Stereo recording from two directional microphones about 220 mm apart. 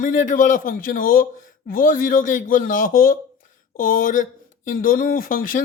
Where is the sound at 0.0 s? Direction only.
40° left (ahead or behind).